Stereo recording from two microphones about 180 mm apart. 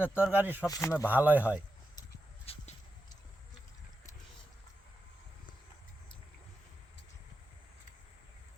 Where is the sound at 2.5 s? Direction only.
35° left (ahead or behind).